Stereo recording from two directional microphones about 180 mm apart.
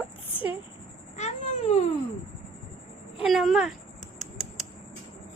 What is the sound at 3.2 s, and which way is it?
Speech, centre (ahead or behind).